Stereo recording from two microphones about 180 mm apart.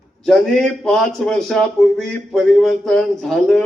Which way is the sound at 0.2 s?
5° left (ahead or behind).